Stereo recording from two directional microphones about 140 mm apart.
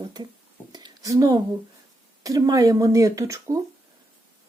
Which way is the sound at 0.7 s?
30° right (ahead or behind).